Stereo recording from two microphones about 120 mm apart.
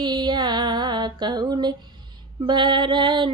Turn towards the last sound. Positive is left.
turn(degrees=-40)  # may be behind; listen again after turning